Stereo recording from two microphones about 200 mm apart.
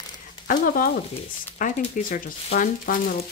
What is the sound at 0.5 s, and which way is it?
Speech, 45° left (ahead or behind).